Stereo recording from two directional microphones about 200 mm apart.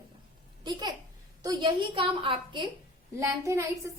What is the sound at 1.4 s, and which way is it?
A woman's voice, 20° right (ahead or behind).